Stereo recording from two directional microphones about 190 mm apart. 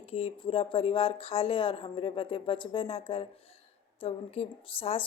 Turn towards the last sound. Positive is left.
turn(degrees=30)  # may be behind; listen again after turning